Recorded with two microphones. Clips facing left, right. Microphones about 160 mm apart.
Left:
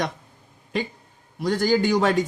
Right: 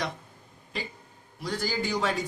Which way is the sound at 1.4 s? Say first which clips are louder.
Left 10 dB; 70° left (ahead or behind).